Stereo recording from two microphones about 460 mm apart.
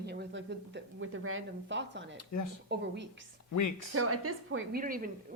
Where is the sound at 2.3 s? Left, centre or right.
Left.